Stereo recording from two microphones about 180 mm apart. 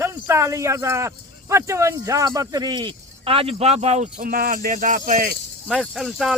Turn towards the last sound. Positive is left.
turn(degrees=0)  # may be behind; listen again after turning